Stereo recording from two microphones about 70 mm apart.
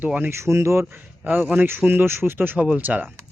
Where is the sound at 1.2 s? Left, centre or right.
Right.